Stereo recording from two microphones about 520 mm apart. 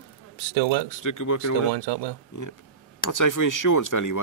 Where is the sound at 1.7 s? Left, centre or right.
Right.